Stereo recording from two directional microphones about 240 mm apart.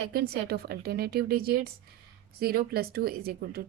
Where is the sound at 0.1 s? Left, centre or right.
Right.